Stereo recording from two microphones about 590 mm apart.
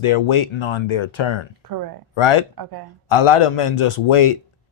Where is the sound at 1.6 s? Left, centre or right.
Right.